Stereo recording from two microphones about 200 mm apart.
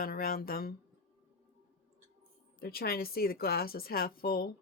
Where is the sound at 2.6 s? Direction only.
50° left (ahead or behind).